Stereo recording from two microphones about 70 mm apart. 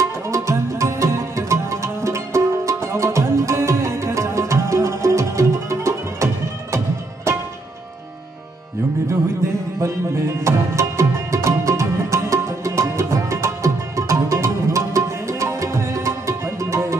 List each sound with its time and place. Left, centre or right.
0.3 s music: right
9.8 s music: right